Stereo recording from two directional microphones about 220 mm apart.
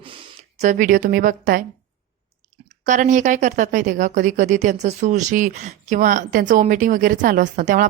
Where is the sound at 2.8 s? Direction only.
35° right (ahead or behind).